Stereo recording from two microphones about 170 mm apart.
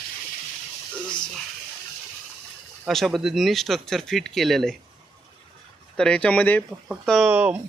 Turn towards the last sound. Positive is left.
turn(degrees=-10)  # may be behind; listen again after turning